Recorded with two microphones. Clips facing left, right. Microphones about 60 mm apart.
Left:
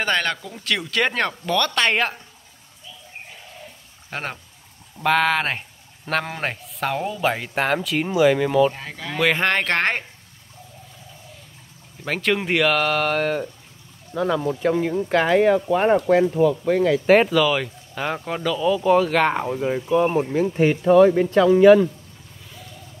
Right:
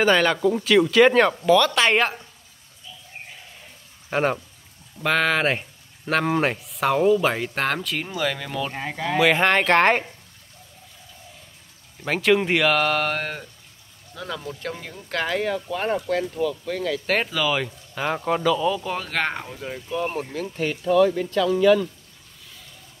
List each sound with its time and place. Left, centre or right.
0.0 s speech: centre
0.4 s speech: centre
0.7 s speech: centre
4.1 s speech: centre
8.0 s speech: centre
8.7 s speech: centre
9.1 s speech: centre
12.0 s speech: centre
14.1 s speech: centre
17.2 s speech: centre
19.4 s speech: left